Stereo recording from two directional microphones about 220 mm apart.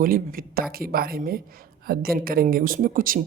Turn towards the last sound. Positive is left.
turn(degrees=-40)  # may be behind; listen again after turning